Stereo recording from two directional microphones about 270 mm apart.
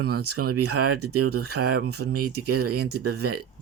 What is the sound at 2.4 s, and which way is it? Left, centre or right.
Speech, right.